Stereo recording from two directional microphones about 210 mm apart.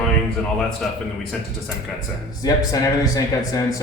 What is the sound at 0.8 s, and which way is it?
Speech, centre (ahead or behind).